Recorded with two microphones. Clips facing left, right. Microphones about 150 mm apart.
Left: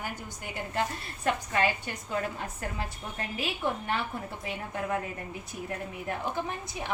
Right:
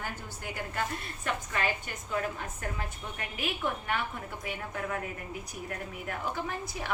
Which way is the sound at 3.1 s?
30° left (ahead or behind).